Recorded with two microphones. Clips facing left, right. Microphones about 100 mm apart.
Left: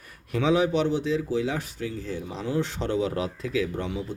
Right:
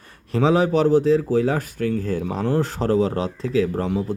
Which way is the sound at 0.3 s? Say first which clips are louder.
Right 4 dB; 35° right (ahead or behind).